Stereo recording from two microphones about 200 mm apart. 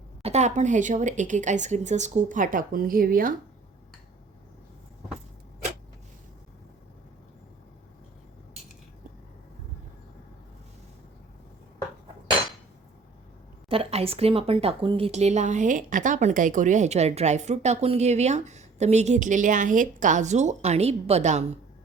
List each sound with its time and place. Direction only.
0.2 s a woman's voice: 35° right (ahead or behind)
13.7 s a woman's voice: 30° right (ahead or behind)